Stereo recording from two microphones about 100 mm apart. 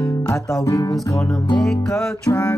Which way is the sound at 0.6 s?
35° left (ahead or behind).